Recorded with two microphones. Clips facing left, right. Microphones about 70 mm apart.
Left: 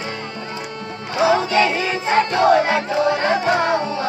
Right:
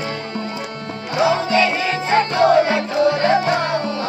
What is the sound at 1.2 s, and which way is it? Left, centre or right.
Music, centre.